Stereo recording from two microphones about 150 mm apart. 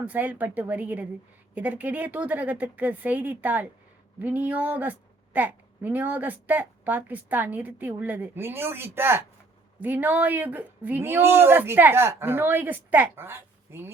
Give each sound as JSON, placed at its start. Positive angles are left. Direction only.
{"t": 0.0, "sound": "speech", "side_deg": -10}